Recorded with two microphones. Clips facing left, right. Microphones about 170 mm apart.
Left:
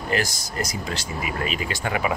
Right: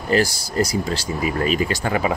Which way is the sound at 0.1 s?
30° right (ahead or behind).